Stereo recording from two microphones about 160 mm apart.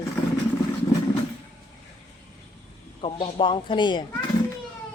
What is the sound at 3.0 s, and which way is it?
A man's voice, 35° left (ahead or behind).